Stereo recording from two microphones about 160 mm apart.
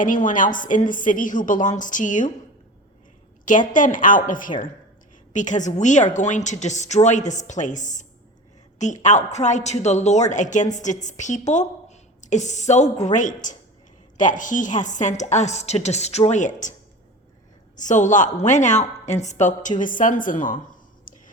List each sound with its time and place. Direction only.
0.0 s a woman's voice: 55° left (ahead or behind)
3.4 s a woman's voice: 55° left (ahead or behind)
9.0 s a woman's voice: 45° left (ahead or behind)
17.7 s a woman's voice: 50° left (ahead or behind)
21.1 s whispering: 60° left (ahead or behind)